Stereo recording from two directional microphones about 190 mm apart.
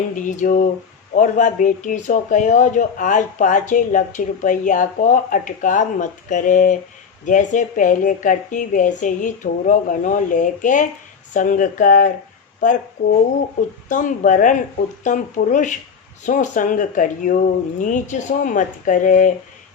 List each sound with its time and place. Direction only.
0.1 s a woman's voice: 40° left (ahead or behind)